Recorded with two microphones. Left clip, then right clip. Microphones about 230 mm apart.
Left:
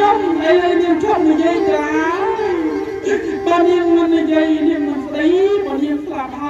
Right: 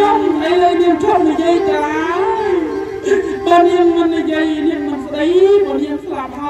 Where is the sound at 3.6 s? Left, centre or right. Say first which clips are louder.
Right 1 dB; right.